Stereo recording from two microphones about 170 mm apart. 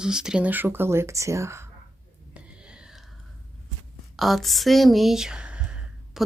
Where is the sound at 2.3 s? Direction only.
5° right (ahead or behind).